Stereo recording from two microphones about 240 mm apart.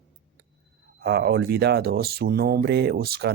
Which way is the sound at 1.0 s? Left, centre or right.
Right.